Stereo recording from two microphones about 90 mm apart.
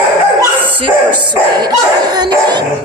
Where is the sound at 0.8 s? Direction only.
60° right (ahead or behind).